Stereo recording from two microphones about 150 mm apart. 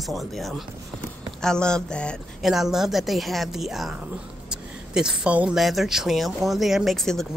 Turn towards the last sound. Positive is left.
turn(degrees=0)  # may be behind; listen again after turning